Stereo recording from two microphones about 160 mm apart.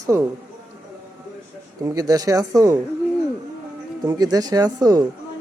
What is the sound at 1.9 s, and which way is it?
Speech, 20° right (ahead or behind).